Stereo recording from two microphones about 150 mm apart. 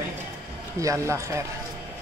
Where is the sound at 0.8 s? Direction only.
20° right (ahead or behind).